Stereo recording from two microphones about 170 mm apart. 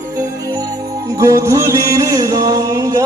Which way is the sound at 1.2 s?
20° right (ahead or behind).